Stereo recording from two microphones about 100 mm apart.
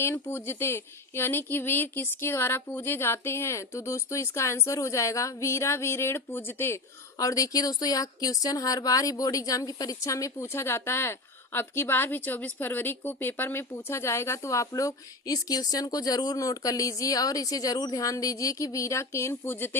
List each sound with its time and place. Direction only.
0.0 s speech: 25° left (ahead or behind)
7.2 s speech: 35° left (ahead or behind)